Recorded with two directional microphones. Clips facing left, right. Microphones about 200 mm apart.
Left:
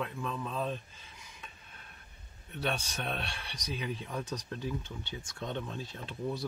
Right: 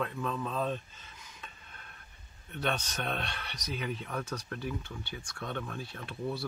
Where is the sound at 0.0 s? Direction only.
10° left (ahead or behind).